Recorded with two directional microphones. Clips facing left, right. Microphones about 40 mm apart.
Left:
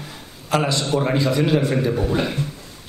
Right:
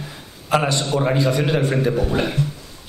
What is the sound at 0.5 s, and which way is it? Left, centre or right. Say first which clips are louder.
A man's voice: right 1 dB; centre.